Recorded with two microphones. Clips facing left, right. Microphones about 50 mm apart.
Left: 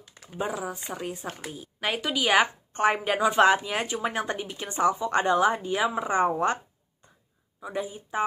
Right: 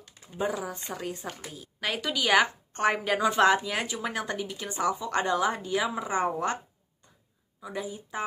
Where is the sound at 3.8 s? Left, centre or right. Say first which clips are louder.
Left 3 dB; left.